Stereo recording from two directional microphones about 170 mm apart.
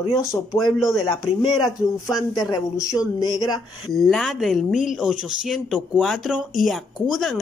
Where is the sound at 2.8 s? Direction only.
20° left (ahead or behind).